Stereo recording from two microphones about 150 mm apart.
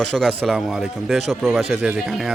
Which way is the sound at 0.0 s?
5° left (ahead or behind).